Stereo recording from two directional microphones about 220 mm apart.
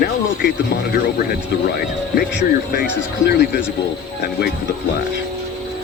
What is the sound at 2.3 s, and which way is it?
Speech, 45° left (ahead or behind).